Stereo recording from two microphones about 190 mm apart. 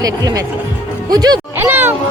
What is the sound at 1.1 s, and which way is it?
Music, 20° right (ahead or behind).